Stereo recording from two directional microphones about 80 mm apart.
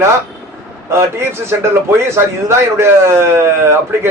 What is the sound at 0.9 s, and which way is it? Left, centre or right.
A man's voice, right.